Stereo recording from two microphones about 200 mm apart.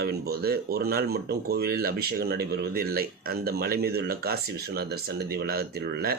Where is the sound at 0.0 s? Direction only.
50° right (ahead or behind).